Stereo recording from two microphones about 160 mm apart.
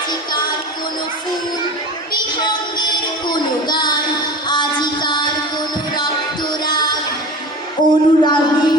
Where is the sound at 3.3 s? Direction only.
25° left (ahead or behind).